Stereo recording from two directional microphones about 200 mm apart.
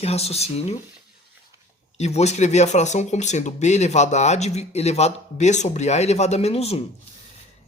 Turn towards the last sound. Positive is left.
turn(degrees=30)  # may be behind; listen again after turning